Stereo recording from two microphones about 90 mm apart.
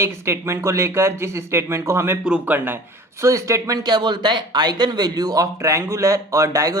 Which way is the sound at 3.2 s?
35° right (ahead or behind).